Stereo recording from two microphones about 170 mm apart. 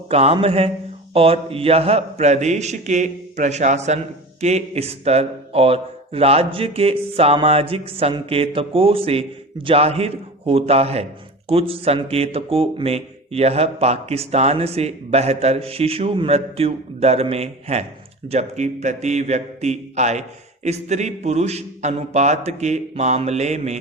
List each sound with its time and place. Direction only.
0.1 s a man's voice: 35° right (ahead or behind)